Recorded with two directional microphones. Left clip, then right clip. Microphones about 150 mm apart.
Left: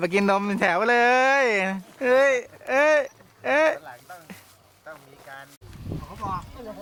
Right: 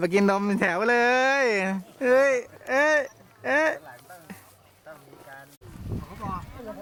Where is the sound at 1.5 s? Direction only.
30° right (ahead or behind).